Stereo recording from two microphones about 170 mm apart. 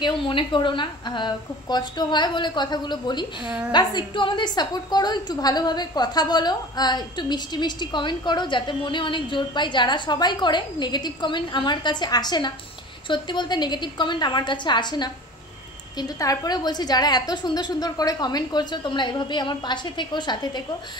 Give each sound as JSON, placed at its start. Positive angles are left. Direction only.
{"t": 0.0, "sound": "a woman's voice", "side_deg": 30}